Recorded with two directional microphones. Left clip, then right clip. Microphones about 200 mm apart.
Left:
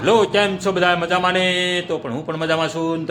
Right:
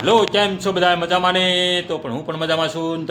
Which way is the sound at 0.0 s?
Centre (ahead or behind).